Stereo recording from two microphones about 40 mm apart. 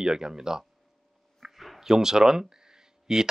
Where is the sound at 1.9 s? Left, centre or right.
Centre.